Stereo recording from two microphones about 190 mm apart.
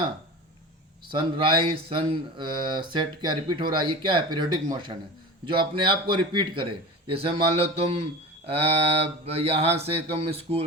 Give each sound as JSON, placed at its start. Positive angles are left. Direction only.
{"t": 1.1, "sound": "speech", "side_deg": -25}
{"t": 8.4, "sound": "mantra", "side_deg": -30}